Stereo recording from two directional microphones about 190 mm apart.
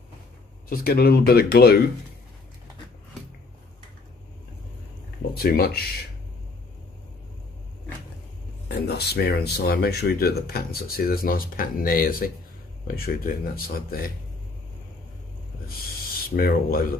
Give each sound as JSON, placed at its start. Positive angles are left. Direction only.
{"t": 0.7, "sound": "speech", "side_deg": 55}
{"t": 5.3, "sound": "speech", "side_deg": 55}
{"t": 8.6, "sound": "speech", "side_deg": 60}
{"t": 16.3, "sound": "speech", "side_deg": 50}